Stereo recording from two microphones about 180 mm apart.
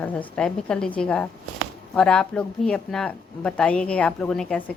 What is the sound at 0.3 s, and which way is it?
A woman's voice, 5° left (ahead or behind).